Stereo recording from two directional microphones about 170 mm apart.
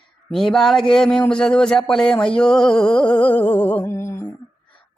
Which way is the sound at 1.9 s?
5° left (ahead or behind).